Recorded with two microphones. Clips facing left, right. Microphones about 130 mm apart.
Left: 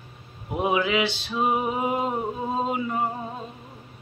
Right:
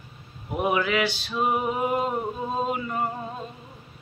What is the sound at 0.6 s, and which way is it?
Male singing, 20° left (ahead or behind).